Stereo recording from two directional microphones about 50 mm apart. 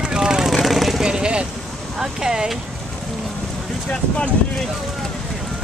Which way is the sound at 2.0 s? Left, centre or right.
Centre.